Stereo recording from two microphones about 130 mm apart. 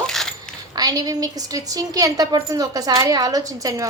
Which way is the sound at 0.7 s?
30° right (ahead or behind).